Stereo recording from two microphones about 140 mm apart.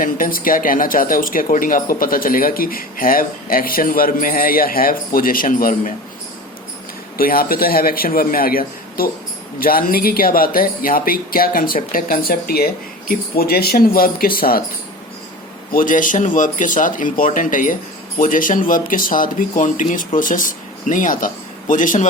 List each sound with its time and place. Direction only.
0.0 s speech: 85° left
7.2 s speech: 90° left
15.7 s speech: 75° left (ahead or behind)